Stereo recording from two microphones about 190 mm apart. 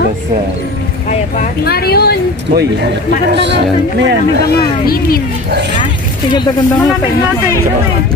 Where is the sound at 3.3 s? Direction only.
65° right (ahead or behind).